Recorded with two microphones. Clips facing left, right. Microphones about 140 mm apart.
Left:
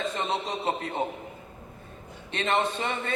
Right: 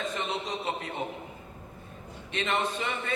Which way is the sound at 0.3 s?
30° left (ahead or behind).